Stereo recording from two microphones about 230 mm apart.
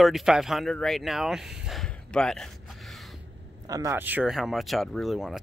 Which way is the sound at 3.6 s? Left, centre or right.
Centre.